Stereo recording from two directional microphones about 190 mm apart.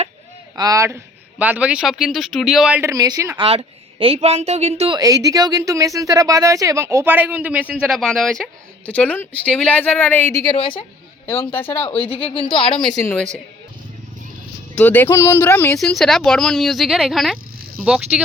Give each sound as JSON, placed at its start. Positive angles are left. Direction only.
{"t": 0.5, "sound": "speech", "side_deg": -20}
{"t": 2.9, "sound": "a woman's voice", "side_deg": -20}
{"t": 4.9, "sound": "speech", "side_deg": -20}
{"t": 10.6, "sound": "a woman's voice", "side_deg": 25}
{"t": 12.3, "sound": "a woman's voice", "side_deg": 30}
{"t": 12.8, "sound": "speech", "side_deg": 20}
{"t": 14.8, "sound": "speech", "side_deg": 10}
{"t": 15.8, "sound": "speech", "side_deg": 0}